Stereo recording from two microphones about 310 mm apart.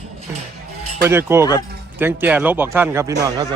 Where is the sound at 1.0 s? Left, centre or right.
Centre.